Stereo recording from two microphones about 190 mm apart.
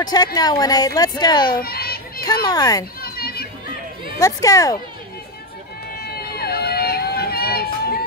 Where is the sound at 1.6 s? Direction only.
55° left (ahead or behind).